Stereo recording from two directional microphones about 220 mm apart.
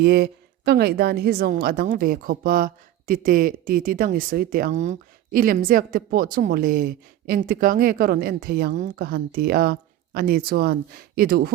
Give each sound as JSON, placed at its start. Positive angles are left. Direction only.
{"t": 0.0, "sound": "a woman's voice", "side_deg": -45}